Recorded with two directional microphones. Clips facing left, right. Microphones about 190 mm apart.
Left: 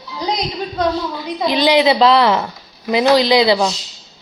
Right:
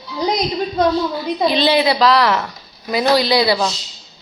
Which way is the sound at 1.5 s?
15° left (ahead or behind).